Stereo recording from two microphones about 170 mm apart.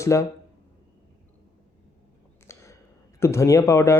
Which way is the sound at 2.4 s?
15° left (ahead or behind).